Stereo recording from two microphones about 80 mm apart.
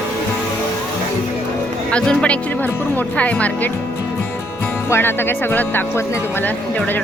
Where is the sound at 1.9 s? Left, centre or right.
Centre.